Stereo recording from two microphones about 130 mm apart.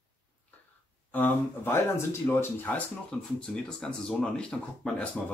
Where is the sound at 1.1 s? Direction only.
15° left (ahead or behind).